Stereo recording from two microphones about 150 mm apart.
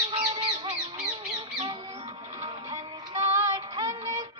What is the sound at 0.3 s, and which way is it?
Duck, 30° right (ahead or behind).